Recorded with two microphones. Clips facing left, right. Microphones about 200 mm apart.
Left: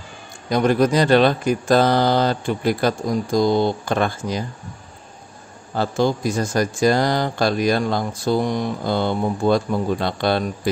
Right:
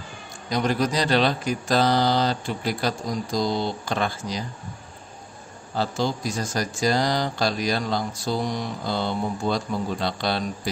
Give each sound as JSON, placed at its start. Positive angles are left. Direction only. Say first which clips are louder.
{"t": 0.5, "sound": "speech", "louder": "left 7 dB", "side_deg": 55}
{"t": 5.8, "sound": "speech", "louder": "left 5 dB", "side_deg": 55}